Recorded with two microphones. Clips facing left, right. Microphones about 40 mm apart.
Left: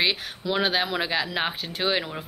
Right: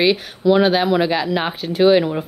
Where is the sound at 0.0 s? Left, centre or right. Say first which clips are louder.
Right 9 dB; centre.